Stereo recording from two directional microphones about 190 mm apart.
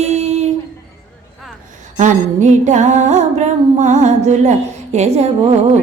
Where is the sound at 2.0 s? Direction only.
40° right (ahead or behind).